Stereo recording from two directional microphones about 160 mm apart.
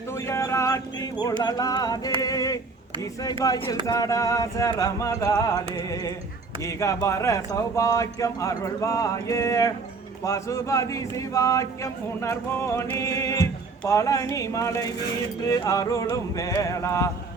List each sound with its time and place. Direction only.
0.3 s speech: 20° left (ahead or behind)